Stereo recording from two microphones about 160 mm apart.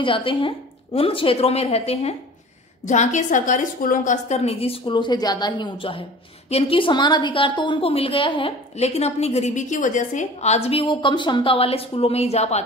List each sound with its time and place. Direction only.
0.0 s a woman's voice: 35° left (ahead or behind)